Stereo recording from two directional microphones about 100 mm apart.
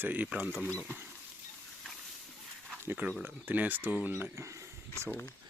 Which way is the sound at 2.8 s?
15° right (ahead or behind).